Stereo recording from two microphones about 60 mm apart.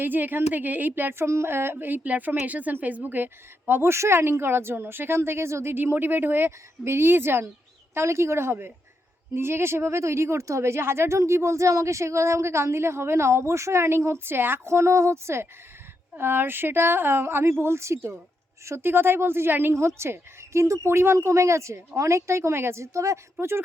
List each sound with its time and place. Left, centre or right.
0.0 s speech: right
1.2 s a woman's voice: right
3.9 s a woman's voice: right
5.7 s a woman's voice: right
20.0 s a woman's voice: right